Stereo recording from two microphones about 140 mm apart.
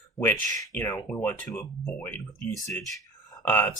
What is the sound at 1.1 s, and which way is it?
Speech, 15° left (ahead or behind).